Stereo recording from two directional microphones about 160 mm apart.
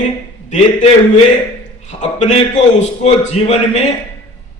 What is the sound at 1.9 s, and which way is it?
A man's voice, 50° left (ahead or behind).